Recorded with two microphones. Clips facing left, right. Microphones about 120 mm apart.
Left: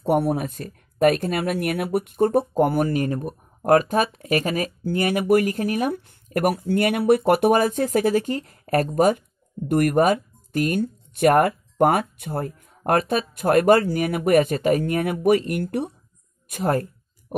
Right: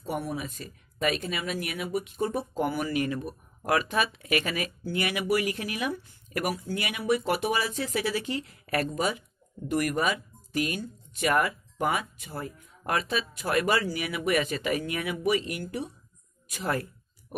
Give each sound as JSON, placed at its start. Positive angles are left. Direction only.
{"t": 0.0, "sound": "speech", "side_deg": 65}
{"t": 16.4, "sound": "speech", "side_deg": 50}